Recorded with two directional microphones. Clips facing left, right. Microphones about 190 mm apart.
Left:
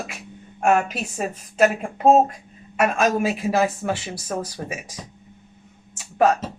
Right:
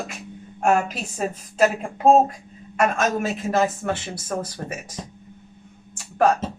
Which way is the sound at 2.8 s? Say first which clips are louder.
Left 2 dB; 10° left (ahead or behind).